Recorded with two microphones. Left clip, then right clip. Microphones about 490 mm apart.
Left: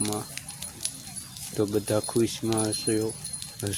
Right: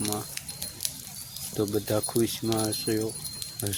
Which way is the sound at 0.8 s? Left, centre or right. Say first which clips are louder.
Right 1 dB; right.